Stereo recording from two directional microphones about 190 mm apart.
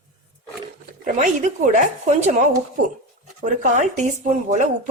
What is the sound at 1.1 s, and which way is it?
Speech, 45° right (ahead or behind).